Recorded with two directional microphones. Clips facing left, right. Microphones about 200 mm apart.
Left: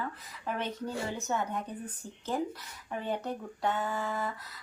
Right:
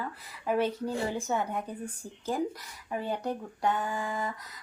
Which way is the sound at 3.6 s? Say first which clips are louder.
Right 1 dB; 15° right (ahead or behind).